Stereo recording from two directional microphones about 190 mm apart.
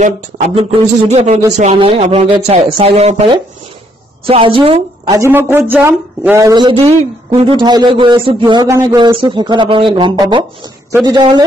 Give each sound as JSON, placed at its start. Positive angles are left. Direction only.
{"t": 0.6, "sound": "a woman's voice", "side_deg": -35}